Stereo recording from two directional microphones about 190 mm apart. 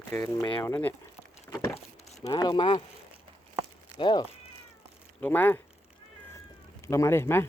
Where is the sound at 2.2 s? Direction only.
20° left (ahead or behind).